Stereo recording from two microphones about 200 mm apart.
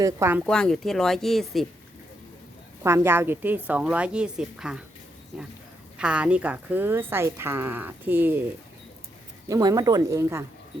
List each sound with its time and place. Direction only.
0.0 s a woman's voice: 10° right (ahead or behind)
0.4 s speech: 5° left (ahead or behind)
2.8 s a woman's voice: 15° right (ahead or behind)
9.5 s a woman's voice: 20° right (ahead or behind)